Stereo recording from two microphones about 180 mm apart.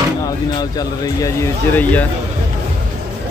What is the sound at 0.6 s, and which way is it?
Speech, 20° left (ahead or behind).